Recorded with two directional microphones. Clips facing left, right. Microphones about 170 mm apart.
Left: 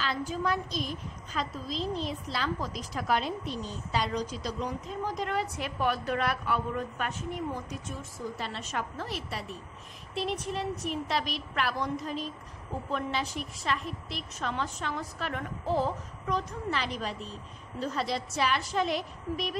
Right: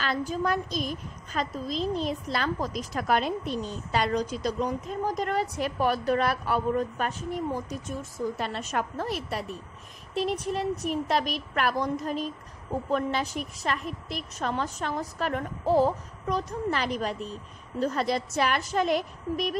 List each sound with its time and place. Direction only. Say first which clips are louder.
0.0 s a woman's voice: right 3 dB; 45° right (ahead or behind)
8.4 s a woman's voice: right 5 dB; 50° right (ahead or behind)